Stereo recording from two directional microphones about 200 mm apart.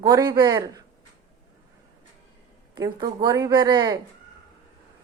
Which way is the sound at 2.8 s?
20° right (ahead or behind).